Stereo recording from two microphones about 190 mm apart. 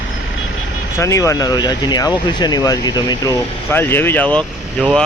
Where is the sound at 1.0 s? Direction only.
15° left (ahead or behind).